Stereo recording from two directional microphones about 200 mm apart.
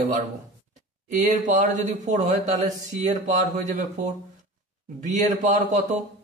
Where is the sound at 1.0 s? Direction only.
35° right (ahead or behind).